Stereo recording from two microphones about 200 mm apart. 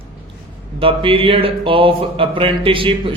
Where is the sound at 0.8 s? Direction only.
25° right (ahead or behind).